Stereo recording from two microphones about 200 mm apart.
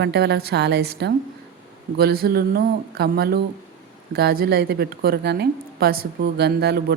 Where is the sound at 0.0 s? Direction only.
55° right (ahead or behind).